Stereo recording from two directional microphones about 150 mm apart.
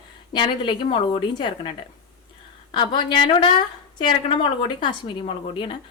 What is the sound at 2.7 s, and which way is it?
Speech, 30° left (ahead or behind).